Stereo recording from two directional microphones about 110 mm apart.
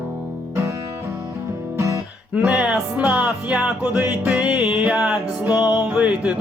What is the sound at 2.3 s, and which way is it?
Music, 10° right (ahead or behind).